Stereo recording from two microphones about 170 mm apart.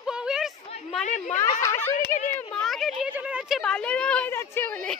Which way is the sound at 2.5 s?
Centre (ahead or behind).